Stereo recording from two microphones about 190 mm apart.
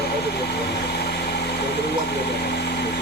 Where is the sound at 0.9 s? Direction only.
60° left (ahead or behind).